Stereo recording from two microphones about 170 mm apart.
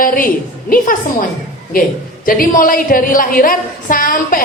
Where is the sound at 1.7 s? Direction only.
60° left (ahead or behind).